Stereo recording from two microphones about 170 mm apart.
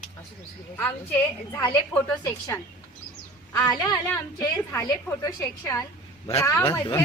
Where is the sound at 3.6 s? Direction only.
20° left (ahead or behind).